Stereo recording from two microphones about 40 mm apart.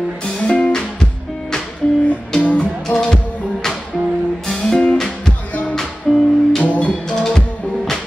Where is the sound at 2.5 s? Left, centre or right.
Centre.